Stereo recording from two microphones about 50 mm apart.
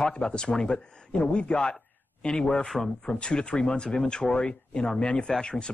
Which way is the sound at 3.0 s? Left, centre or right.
Centre.